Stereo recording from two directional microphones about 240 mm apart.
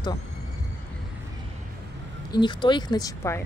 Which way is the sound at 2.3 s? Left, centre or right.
Centre.